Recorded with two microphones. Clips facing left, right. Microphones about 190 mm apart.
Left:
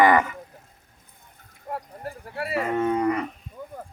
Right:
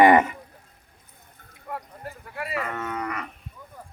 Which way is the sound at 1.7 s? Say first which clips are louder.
Left 2 dB; 35° left (ahead or behind).